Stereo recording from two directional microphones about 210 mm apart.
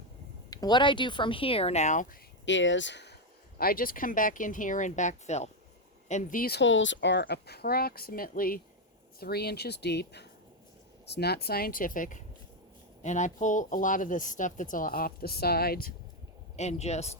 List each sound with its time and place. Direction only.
0.5 s speech: 20° left (ahead or behind)
2.4 s speech: 60° left (ahead or behind)
3.6 s speech: 45° left (ahead or behind)
16.6 s speech: 30° left (ahead or behind)